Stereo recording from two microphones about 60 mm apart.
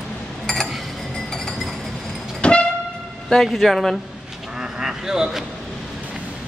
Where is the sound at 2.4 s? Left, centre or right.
Centre.